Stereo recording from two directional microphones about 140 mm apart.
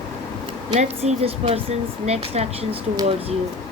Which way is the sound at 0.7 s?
50° right (ahead or behind).